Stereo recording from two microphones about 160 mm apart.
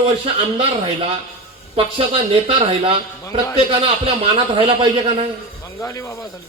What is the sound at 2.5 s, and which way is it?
A man's voice, 35° right (ahead or behind).